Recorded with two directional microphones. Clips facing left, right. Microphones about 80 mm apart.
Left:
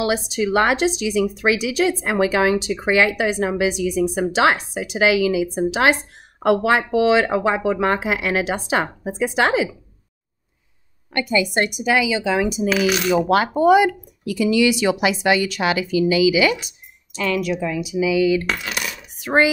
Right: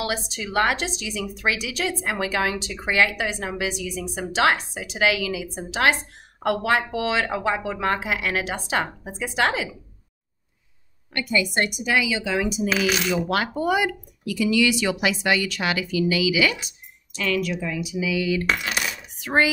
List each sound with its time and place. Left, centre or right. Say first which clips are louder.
0.0 s speech: left 8 dB; centre
11.1 s speech: left 4 dB; left